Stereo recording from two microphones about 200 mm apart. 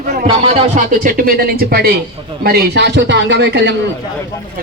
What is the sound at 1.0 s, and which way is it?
Speech, 45° right (ahead or behind).